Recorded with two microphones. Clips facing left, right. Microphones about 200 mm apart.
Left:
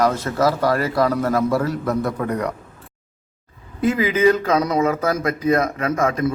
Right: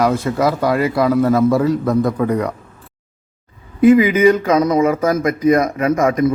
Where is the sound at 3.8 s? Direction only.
15° right (ahead or behind).